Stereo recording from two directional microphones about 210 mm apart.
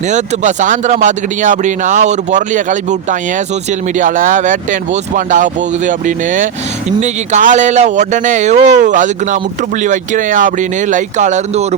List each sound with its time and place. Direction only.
0.1 s speech: 35° right (ahead or behind)